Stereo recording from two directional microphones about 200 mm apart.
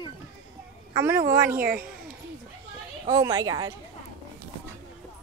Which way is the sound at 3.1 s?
20° right (ahead or behind).